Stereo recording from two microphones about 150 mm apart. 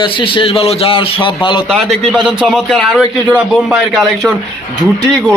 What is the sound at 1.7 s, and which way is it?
A man's voice, centre (ahead or behind).